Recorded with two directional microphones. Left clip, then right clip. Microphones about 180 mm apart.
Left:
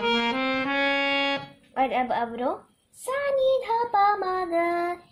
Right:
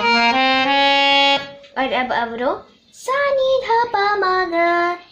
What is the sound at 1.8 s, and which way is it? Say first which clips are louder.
Music: right 5 dB; 40° left (ahead or behind).